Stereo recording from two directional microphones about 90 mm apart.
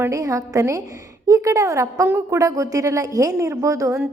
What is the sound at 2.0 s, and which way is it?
Speech, 25° right (ahead or behind).